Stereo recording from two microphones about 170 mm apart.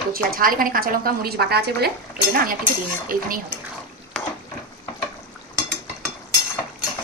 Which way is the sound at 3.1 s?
55° right (ahead or behind).